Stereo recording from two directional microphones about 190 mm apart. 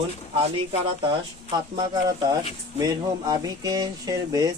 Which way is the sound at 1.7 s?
20° right (ahead or behind).